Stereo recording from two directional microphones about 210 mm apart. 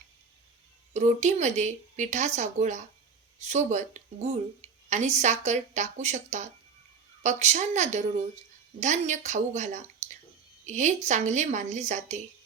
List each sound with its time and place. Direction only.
0.9 s speech: 35° right (ahead or behind)
10.0 s a sound: 35° right (ahead or behind)
10.7 s speech: 35° right (ahead or behind)